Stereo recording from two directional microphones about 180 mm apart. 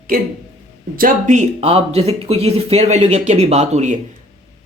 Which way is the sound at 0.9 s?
45° right (ahead or behind).